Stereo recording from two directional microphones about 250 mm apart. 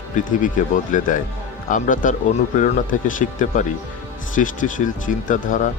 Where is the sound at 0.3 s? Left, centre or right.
Left.